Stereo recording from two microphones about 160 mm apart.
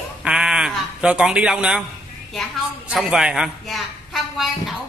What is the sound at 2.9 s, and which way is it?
A woman's voice, 5° right (ahead or behind).